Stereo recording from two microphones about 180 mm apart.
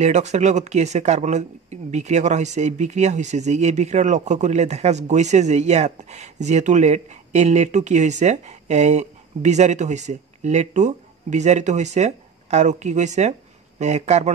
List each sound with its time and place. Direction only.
0.0 s speech: 40° right (ahead or behind)